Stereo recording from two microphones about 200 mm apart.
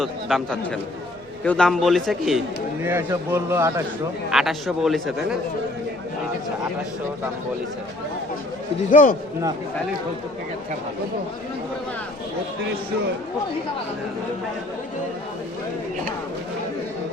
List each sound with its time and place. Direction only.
0.0 s a man's voice: centre (ahead or behind)
2.8 s a man's voice: 10° right (ahead or behind)
4.3 s a man's voice: centre (ahead or behind)
8.9 s a man's voice: 40° left (ahead or behind)